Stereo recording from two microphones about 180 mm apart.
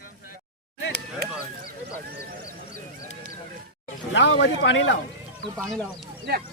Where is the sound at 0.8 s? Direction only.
90° left.